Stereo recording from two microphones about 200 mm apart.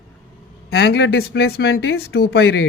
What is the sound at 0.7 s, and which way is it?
Speech, 55° left (ahead or behind).